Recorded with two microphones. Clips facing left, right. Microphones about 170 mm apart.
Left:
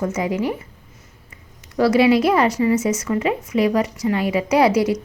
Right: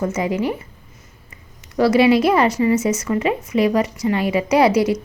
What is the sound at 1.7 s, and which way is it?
A woman's voice, 25° right (ahead or behind).